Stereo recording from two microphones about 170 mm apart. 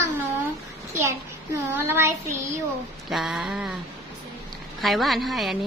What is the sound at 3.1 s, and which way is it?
Speech, centre (ahead or behind).